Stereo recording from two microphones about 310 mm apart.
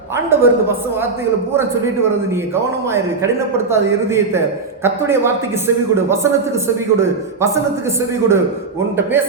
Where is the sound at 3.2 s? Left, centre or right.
Centre.